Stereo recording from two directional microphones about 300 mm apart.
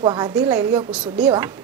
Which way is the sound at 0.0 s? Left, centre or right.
Centre.